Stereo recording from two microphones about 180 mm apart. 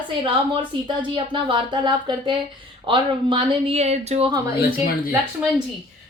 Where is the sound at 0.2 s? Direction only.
25° right (ahead or behind).